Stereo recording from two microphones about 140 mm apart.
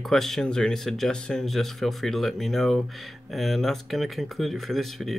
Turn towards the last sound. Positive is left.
turn(degrees=0)  # may be behind; listen again after turning